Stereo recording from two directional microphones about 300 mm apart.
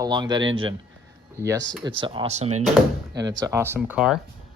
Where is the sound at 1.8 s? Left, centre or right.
Centre.